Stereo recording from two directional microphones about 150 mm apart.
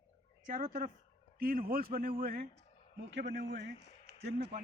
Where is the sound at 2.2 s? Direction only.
90° right.